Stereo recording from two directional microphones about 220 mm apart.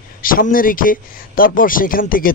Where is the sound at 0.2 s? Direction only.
40° left (ahead or behind).